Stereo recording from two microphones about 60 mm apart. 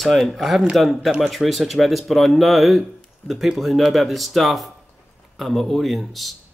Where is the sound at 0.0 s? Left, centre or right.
Centre.